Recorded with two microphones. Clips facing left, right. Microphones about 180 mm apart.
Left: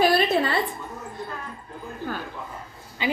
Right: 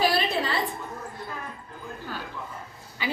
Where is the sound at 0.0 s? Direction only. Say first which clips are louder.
Left 5 dB; 50° left (ahead or behind).